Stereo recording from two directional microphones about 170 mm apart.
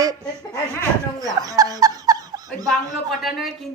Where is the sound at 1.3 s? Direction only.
20° right (ahead or behind).